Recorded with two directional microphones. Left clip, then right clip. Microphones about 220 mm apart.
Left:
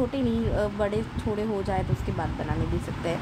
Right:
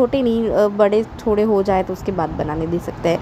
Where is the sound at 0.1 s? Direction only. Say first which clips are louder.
Right 11 dB; 25° right (ahead or behind).